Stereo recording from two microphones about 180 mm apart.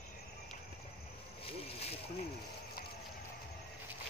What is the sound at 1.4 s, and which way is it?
Speech, 35° left (ahead or behind).